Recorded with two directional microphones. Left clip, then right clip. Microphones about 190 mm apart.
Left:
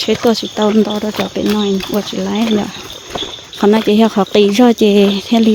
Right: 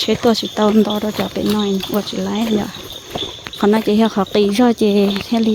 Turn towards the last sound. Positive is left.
turn(degrees=30)  # may be behind; listen again after turning